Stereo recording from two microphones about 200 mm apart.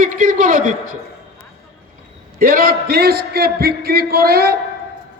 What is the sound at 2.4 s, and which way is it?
A man's voice, 45° right (ahead or behind).